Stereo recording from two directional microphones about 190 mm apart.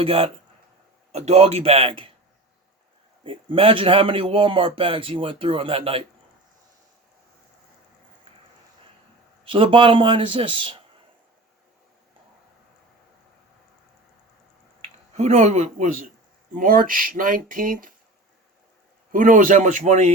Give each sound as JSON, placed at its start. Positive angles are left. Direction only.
{"t": 0.0, "sound": "speech", "side_deg": -30}
{"t": 3.2, "sound": "a man's voice", "side_deg": -30}
{"t": 9.4, "sound": "a man's voice", "side_deg": -25}
{"t": 14.8, "sound": "speech", "side_deg": -35}
{"t": 19.1, "sound": "speech", "side_deg": -45}